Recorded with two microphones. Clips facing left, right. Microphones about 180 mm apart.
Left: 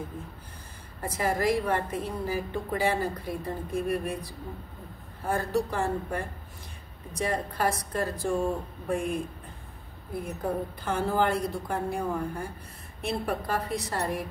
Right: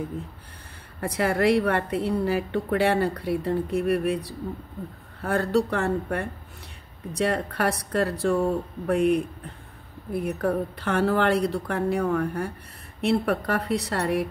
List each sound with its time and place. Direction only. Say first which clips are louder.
1.0 s a woman's voice: right 5 dB; 70° right (ahead or behind)